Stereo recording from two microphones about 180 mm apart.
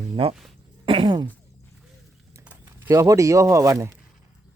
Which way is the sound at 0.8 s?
30° right (ahead or behind).